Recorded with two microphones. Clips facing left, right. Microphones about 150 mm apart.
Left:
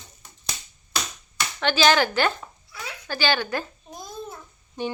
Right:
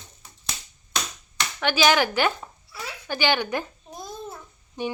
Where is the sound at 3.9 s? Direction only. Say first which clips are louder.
Even; centre (ahead or behind).